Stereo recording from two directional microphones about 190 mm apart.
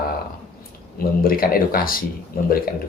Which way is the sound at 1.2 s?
50° left (ahead or behind).